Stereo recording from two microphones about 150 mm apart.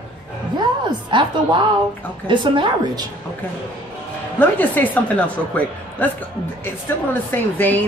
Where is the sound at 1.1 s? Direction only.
30° right (ahead or behind).